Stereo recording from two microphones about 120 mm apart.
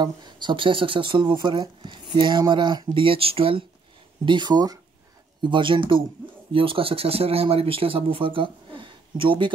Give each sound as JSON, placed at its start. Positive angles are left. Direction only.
{"t": 0.0, "sound": "speech", "side_deg": -40}
{"t": 4.3, "sound": "speech", "side_deg": -35}